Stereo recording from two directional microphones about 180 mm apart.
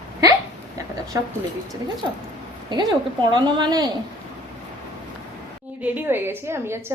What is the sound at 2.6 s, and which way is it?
Speech, 25° right (ahead or behind).